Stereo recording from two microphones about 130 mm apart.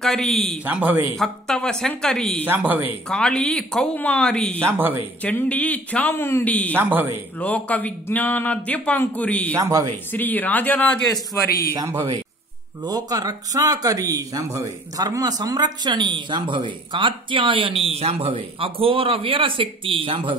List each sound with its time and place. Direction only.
0.0 s speech: 5° left (ahead or behind)
0.7 s speech: 15° right (ahead or behind)
1.1 s speech: 5° left (ahead or behind)
2.4 s speech: 15° right (ahead or behind)
3.1 s speech: 5° left (ahead or behind)
4.6 s speech: 15° right (ahead or behind)
5.2 s speech: 10° left (ahead or behind)
6.7 s speech: 15° right (ahead or behind)
7.3 s speech: 10° left (ahead or behind)
9.6 s speech: 25° right (ahead or behind)
10.1 s speech: 15° left (ahead or behind)
11.7 s speech: 25° right (ahead or behind); by 20.3 s 45° right (ahead or behind)